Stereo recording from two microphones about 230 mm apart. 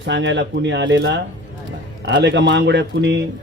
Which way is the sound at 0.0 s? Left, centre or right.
Right.